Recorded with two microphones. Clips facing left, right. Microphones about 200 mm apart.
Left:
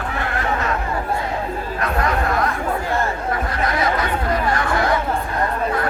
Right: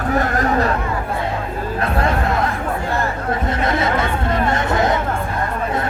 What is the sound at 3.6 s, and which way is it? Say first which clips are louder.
Chatter: right 1 dB; 25° right (ahead or behind).